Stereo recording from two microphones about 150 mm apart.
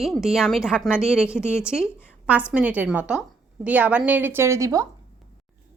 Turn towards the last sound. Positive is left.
turn(degrees=-20)  # may be behind; listen again after turning